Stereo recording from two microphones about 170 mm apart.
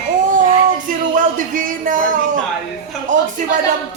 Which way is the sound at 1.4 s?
50° right (ahead or behind).